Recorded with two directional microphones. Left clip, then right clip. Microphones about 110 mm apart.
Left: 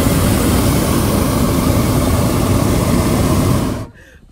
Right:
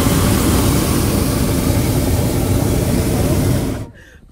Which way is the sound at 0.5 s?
35° left (ahead or behind).